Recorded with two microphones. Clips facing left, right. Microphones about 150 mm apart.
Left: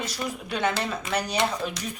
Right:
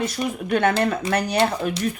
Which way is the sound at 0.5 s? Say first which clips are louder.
Right 8 dB; 55° right (ahead or behind).